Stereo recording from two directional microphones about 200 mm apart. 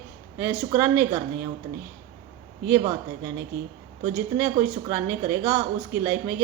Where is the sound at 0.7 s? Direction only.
10° right (ahead or behind).